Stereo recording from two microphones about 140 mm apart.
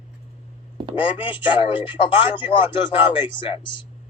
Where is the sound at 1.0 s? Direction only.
40° left (ahead or behind).